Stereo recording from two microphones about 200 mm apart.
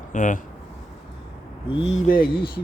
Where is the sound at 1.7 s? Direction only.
25° left (ahead or behind).